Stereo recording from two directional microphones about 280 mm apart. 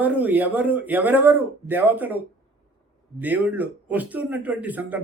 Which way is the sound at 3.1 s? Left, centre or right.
Centre.